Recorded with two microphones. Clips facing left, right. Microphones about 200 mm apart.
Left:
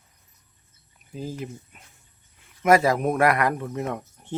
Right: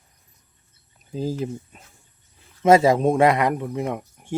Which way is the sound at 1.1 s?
35° right (ahead or behind).